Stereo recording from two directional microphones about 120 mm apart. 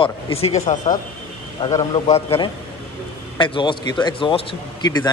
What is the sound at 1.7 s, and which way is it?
Speech, 30° left (ahead or behind).